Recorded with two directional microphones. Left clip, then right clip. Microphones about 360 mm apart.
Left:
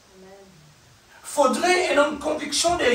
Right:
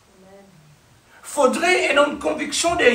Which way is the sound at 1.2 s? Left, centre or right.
Right.